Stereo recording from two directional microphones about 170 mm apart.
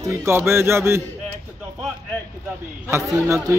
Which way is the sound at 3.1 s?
20° right (ahead or behind).